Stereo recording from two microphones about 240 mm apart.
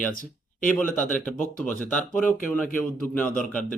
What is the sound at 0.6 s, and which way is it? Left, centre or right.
Speech, centre.